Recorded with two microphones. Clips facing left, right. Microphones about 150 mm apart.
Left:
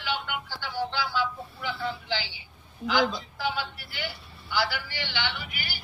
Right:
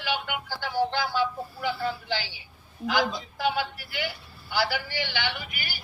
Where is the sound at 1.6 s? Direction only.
55° right (ahead or behind).